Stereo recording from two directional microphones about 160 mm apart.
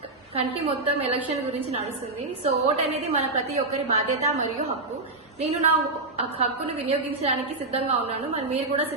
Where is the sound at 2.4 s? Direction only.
40° right (ahead or behind).